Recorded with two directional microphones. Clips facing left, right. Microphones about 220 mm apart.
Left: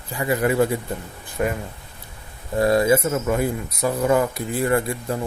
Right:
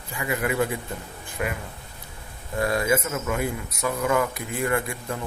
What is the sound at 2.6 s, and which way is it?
Speech, 35° left (ahead or behind).